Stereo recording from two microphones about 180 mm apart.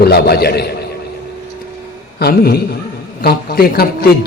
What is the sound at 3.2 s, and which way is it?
Speech, 60° left (ahead or behind).